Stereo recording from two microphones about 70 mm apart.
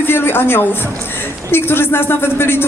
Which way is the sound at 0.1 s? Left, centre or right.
Left.